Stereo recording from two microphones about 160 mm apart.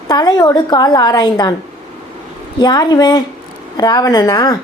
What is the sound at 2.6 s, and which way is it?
A woman's voice, 25° left (ahead or behind).